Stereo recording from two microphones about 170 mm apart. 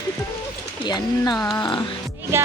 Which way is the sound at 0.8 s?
25° left (ahead or behind).